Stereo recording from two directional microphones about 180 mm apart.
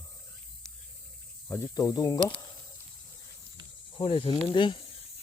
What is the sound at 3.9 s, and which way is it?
Speech, 30° left (ahead or behind).